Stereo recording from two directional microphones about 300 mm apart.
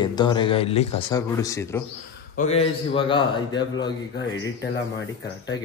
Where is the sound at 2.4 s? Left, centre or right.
Left.